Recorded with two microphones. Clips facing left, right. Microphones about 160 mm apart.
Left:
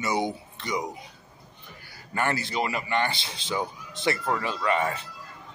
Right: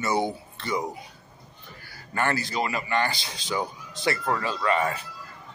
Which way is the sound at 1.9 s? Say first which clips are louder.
Right 1 dB; 20° left (ahead or behind).